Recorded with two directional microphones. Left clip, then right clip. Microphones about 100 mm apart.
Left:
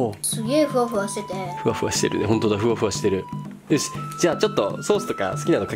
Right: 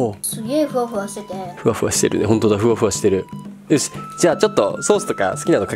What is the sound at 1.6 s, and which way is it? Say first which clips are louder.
Speech: right 5 dB; 30° right (ahead or behind).